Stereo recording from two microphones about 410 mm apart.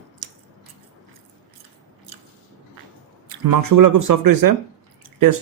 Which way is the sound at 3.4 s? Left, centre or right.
Right.